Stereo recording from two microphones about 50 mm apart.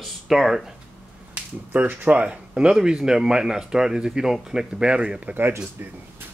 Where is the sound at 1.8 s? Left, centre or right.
Right.